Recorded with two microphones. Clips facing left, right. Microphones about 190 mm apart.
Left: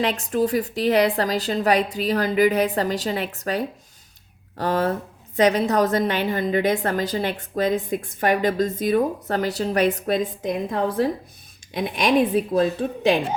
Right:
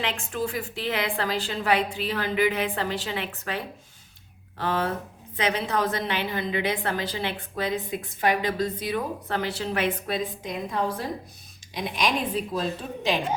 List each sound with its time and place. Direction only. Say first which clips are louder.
0.0 s a woman's voice: left 8 dB; 40° left (ahead or behind)